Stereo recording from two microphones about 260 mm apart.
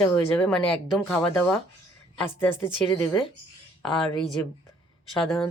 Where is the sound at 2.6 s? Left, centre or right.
Centre.